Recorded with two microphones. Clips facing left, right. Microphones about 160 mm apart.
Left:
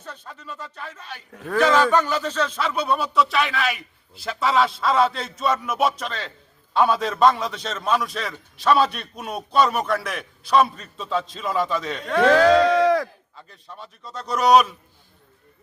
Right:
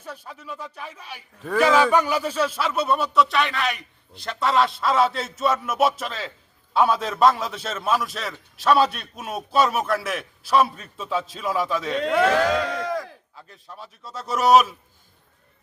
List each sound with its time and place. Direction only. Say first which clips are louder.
0.0 s a man's voice: right 1 dB; 10° right (ahead or behind)
12.6 s crowd: left 9 dB; 75° left (ahead or behind)
13.3 s a man's voice: even; centre (ahead or behind)